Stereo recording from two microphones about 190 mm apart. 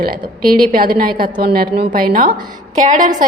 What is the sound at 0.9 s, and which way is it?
A woman's voice, 50° right (ahead or behind).